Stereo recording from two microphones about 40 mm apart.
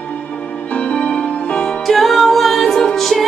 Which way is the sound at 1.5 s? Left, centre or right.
Left.